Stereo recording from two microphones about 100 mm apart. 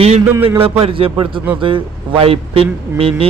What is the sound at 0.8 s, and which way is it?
A man's voice, 65° right (ahead or behind).